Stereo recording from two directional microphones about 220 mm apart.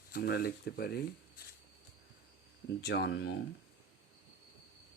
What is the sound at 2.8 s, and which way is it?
Speech, 50° left (ahead or behind).